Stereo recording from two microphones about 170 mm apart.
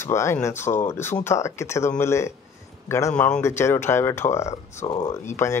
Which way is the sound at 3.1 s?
5° left (ahead or behind).